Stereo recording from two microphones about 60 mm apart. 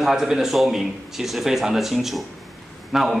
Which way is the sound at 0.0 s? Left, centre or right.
Centre.